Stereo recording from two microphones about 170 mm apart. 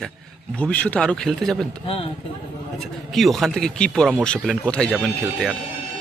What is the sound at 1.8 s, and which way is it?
Speech, 35° left (ahead or behind).